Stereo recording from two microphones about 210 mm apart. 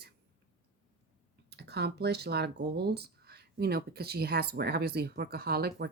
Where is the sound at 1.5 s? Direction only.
50° right (ahead or behind).